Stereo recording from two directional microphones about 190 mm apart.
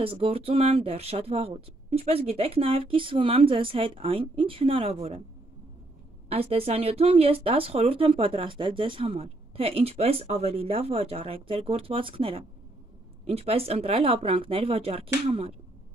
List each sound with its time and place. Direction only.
0.0 s speech: 30° right (ahead or behind)
6.2 s speech: 30° right (ahead or behind)